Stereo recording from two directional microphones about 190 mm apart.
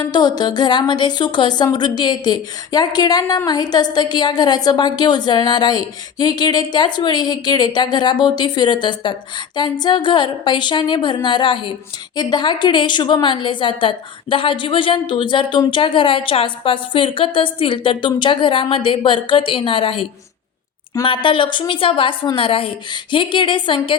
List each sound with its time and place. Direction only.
0.1 s a woman's voice: 20° left (ahead or behind)